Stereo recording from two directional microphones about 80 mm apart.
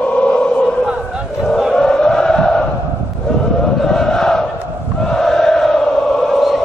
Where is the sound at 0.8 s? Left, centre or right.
Centre.